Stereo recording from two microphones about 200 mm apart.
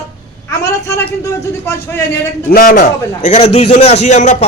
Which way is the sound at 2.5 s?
45° left (ahead or behind).